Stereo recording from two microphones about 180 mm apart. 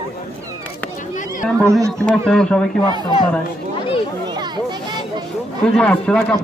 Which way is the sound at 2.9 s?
25° right (ahead or behind).